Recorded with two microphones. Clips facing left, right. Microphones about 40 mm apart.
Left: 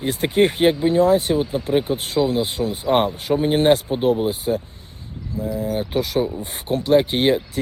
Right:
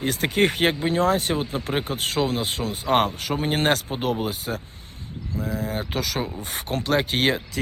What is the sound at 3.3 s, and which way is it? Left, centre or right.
Speech, right.